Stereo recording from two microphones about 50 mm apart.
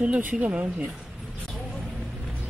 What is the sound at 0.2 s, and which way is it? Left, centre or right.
Speech, right.